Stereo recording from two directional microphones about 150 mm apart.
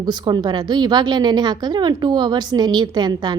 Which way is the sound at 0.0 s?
30° right (ahead or behind).